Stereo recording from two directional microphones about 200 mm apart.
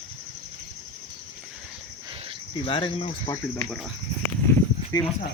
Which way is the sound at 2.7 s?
25° left (ahead or behind).